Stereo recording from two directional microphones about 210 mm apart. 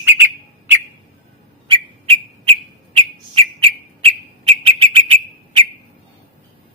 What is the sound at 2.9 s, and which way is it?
Bird, 25° right (ahead or behind).